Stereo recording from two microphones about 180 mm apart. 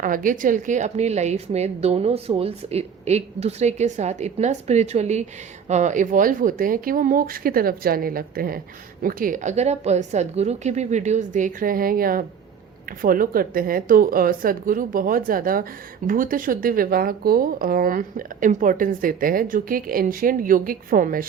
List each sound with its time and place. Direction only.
0.0 s a woman's voice: 50° right (ahead or behind)